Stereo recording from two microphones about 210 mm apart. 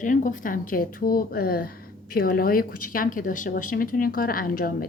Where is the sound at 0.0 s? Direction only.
40° left (ahead or behind).